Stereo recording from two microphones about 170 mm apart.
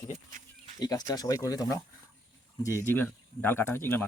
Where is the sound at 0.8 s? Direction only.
20° left (ahead or behind).